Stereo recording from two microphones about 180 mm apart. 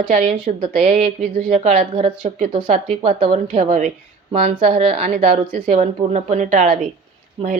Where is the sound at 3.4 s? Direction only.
45° right (ahead or behind).